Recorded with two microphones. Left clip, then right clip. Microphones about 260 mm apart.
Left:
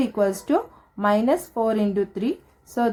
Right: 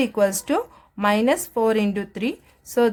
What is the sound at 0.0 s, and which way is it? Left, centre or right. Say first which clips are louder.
Speech: right 2 dB; right.